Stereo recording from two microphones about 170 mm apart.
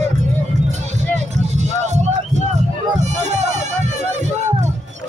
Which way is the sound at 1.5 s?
45° right (ahead or behind).